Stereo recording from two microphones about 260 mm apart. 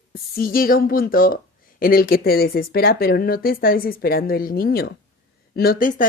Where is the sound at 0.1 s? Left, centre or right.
Left.